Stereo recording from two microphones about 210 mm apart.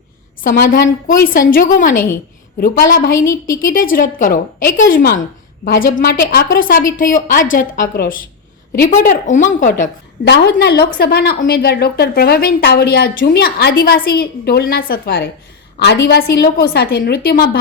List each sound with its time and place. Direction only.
0.4 s a woman's voice: 45° left (ahead or behind)
0.9 s a woman's voice: 40° left (ahead or behind)
10.2 s a woman's voice: 50° left (ahead or behind)